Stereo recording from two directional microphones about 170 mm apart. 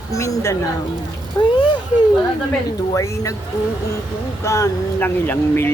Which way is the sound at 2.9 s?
20° left (ahead or behind).